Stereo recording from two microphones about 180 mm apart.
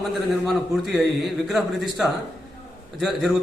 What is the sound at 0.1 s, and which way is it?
A man's voice, centre (ahead or behind).